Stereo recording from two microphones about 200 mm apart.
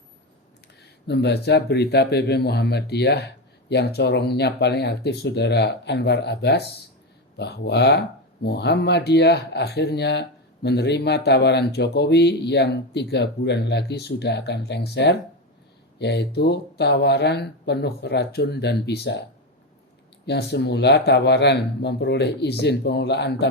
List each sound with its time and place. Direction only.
0.8 s speech: 55° left (ahead or behind)
20.2 s speech: 55° left (ahead or behind)